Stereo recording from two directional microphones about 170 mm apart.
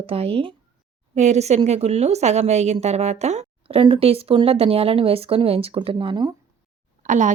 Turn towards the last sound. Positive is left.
turn(degrees=-50)  # may be behind; listen again after turning